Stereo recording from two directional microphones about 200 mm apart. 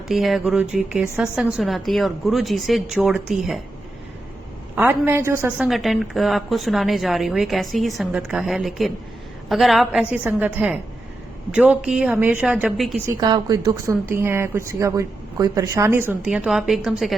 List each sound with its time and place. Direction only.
0.1 s a woman's voice: centre (ahead or behind)
4.7 s speech: 10° right (ahead or behind)
5.6 s a woman's voice: centre (ahead or behind)
13.1 s speech: 20° right (ahead or behind); by 16.9 s centre (ahead or behind)